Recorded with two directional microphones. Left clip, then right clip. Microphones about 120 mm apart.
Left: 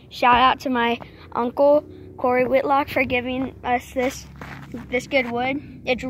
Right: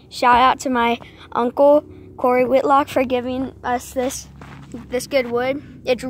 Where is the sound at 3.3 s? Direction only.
35° right (ahead or behind).